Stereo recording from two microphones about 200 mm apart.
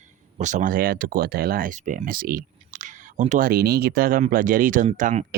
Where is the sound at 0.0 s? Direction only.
35° right (ahead or behind).